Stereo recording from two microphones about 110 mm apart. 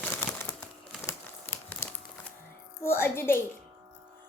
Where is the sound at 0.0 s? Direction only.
15° left (ahead or behind).